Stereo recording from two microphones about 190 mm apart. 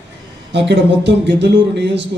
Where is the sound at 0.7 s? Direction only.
65° right (ahead or behind).